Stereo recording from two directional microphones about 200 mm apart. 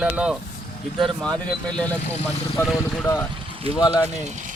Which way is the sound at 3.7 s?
30° right (ahead or behind).